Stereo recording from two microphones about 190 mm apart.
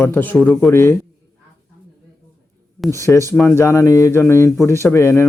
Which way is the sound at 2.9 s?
15° left (ahead or behind).